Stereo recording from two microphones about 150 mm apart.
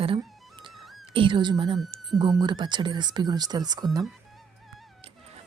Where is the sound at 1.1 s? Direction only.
35° right (ahead or behind).